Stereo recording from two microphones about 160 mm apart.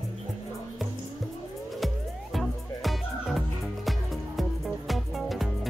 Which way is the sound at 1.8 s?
Centre (ahead or behind).